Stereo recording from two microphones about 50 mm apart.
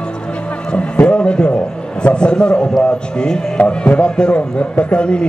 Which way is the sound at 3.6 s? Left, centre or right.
Left.